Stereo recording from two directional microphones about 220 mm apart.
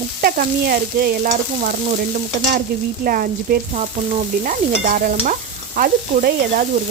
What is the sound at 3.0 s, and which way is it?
Stir, 40° right (ahead or behind).